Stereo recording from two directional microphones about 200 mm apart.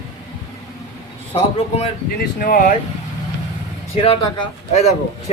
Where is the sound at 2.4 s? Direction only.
45° left (ahead or behind).